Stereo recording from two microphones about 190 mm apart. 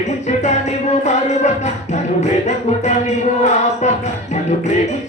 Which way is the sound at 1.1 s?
35° left (ahead or behind).